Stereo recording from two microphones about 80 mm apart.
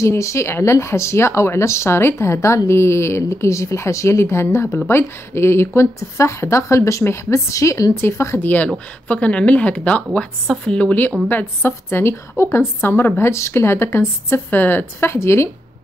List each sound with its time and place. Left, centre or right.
0.0 s speech: left
8.4 s speech: left